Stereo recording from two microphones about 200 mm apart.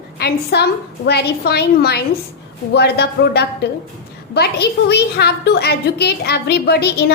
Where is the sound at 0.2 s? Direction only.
55° left (ahead or behind).